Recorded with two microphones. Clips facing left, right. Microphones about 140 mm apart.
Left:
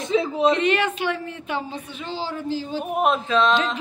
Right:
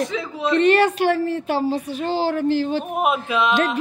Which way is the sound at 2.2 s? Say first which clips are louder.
Right 7 dB; 65° right (ahead or behind).